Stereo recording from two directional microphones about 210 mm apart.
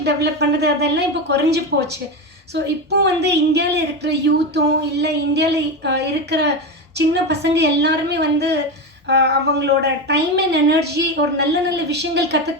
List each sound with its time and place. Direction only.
0.0 s a woman's voice: 55° right (ahead or behind)